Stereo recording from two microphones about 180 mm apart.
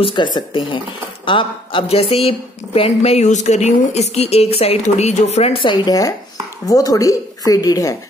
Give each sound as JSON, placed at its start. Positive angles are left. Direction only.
{"t": 0.0, "sound": "a woman's voice", "side_deg": 25}